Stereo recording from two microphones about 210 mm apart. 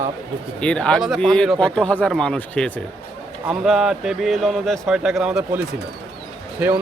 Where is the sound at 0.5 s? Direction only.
5° left (ahead or behind).